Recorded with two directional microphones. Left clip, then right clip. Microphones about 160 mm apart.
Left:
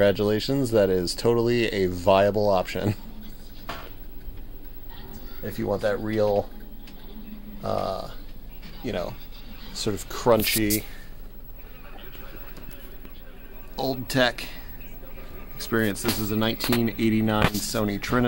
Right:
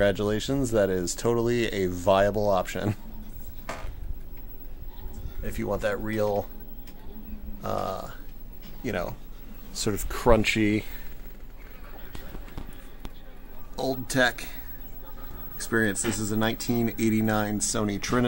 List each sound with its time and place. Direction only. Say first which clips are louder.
0.0 s speech: left 3 dB; 15° left (ahead or behind)
5.4 s speech: left 3 dB; 25° left (ahead or behind)
7.6 s speech: left 3 dB; 10° left (ahead or behind)
8.8 s speech: left 1 dB; 10° right (ahead or behind)
10.5 s speech: even; 30° right (ahead or behind)
13.7 s speech: left 1 dB; 5° left (ahead or behind)